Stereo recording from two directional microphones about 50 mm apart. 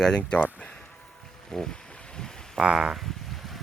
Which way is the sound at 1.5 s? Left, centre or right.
Centre.